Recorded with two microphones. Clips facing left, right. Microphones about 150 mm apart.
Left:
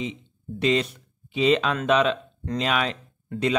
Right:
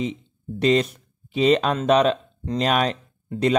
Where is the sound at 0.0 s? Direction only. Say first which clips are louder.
Right 4 dB; 40° right (ahead or behind).